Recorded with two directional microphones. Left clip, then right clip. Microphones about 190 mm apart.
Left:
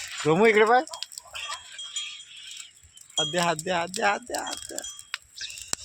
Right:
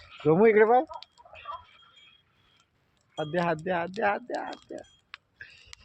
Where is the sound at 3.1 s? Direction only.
25° left (ahead or behind).